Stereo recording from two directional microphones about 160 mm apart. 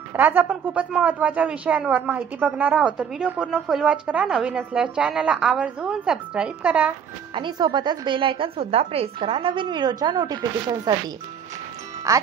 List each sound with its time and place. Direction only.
0.1 s a woman's voice: 10° right (ahead or behind)
7.3 s a woman's voice: 30° right (ahead or behind)
12.1 s a woman's voice: 20° right (ahead or behind)